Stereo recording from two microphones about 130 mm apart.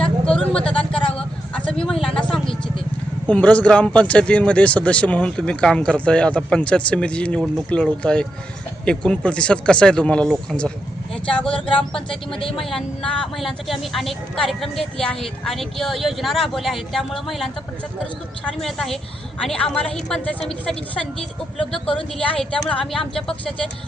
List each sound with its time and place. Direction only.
0.0 s vehicle: 5° left (ahead or behind)
3.2 s speech: 10° left (ahead or behind)
11.1 s vehicle: 10° left (ahead or behind)
12.3 s speech: 40° left (ahead or behind)
12.5 s speech: centre (ahead or behind)